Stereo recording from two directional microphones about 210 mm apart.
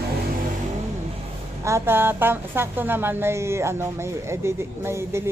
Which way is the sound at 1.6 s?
10° right (ahead or behind).